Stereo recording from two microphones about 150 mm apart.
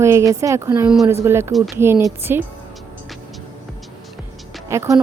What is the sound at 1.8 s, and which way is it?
Speech, 15° right (ahead or behind).